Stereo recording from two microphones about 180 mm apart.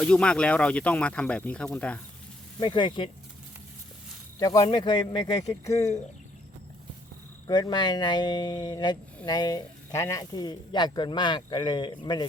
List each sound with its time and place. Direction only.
0.0 s speech: 5° left (ahead or behind)
2.6 s speech: 25° left (ahead or behind)
4.4 s speech: 20° left (ahead or behind)
7.4 s speech: 20° left (ahead or behind)